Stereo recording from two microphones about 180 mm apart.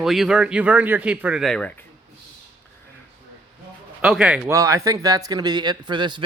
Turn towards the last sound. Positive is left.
turn(degrees=-25)  # may be behind; listen again after turning